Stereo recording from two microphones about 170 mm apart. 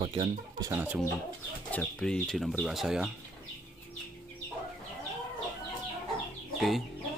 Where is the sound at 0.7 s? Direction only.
10° right (ahead or behind).